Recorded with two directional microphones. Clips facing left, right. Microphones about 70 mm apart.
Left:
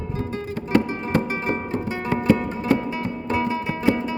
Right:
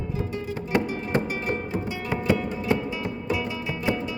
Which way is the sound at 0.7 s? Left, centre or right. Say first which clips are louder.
Left 4 dB; right.